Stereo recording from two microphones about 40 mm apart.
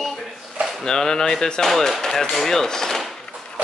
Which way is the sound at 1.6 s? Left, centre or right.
Centre.